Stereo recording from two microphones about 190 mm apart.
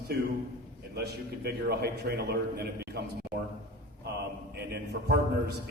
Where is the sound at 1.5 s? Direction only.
55° right (ahead or behind).